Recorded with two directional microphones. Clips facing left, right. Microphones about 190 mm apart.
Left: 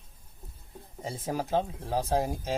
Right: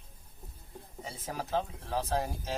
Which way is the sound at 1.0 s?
35° left (ahead or behind).